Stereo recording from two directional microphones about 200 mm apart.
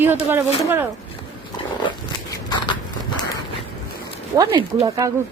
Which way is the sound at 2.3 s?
25° left (ahead or behind).